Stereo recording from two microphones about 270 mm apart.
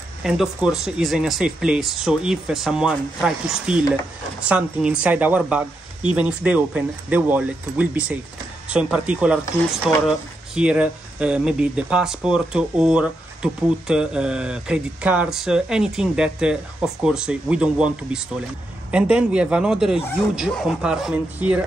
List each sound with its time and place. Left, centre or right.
0.2 s speech: centre